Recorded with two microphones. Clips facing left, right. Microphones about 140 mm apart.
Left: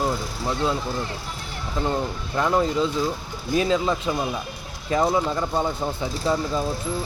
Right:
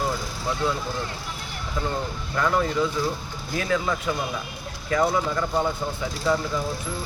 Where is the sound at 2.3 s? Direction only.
20° left (ahead or behind).